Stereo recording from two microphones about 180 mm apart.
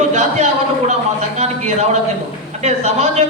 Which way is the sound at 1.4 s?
40° right (ahead or behind).